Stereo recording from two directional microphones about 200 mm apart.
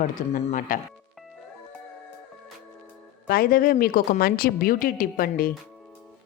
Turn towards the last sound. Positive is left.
turn(degrees=45)  # may be behind; listen again after turning